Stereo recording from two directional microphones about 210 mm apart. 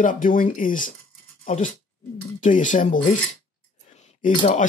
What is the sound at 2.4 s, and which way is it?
Speech, 35° left (ahead or behind).